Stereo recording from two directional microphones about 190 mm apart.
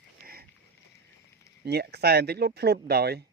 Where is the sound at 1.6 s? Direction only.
60° right (ahead or behind).